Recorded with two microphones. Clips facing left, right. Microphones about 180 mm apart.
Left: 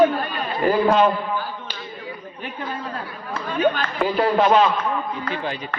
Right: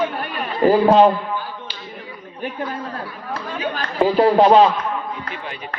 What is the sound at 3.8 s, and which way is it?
Speech, 35° right (ahead or behind).